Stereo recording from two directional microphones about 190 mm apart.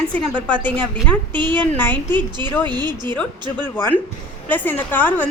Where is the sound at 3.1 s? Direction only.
10° left (ahead or behind).